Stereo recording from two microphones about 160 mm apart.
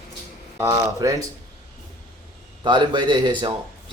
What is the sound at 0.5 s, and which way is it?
Speech, 25° right (ahead or behind).